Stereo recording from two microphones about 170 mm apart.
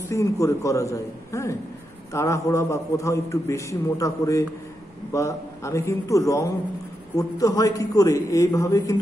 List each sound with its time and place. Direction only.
0.1 s a man's voice: 20° left (ahead or behind)